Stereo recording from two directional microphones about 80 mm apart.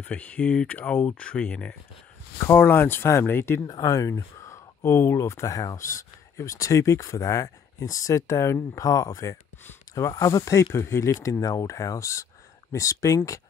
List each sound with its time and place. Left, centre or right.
0.0 s speech: centre
2.3 s speech: left
3.6 s speech: left